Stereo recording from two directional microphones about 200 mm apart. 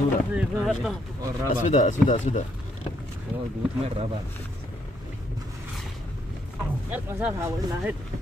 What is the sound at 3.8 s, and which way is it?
Speech, 30° right (ahead or behind).